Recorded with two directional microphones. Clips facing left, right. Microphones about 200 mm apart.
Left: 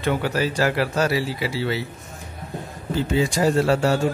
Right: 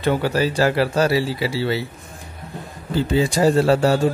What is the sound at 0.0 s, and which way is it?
Speech, 30° right (ahead or behind).